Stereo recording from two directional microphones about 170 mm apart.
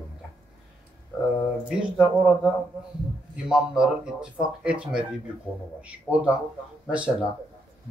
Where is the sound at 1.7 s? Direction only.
5° right (ahead or behind).